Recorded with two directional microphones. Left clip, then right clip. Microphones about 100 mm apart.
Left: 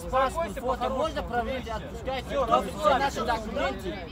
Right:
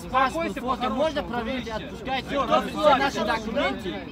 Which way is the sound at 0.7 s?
65° left (ahead or behind).